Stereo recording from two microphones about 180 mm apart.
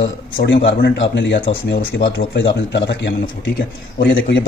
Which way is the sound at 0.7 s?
70° left (ahead or behind).